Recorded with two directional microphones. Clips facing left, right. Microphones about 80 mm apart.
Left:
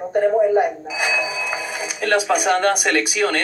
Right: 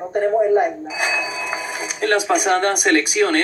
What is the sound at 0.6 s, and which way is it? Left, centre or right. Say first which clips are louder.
Speech: even; right.